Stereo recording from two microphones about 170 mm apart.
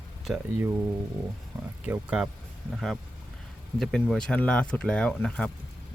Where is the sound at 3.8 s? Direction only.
5° left (ahead or behind).